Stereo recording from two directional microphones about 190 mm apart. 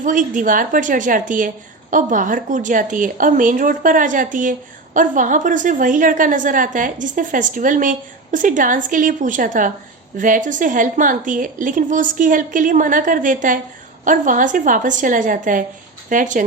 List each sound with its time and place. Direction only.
0.0 s a woman's voice: 45° right (ahead or behind)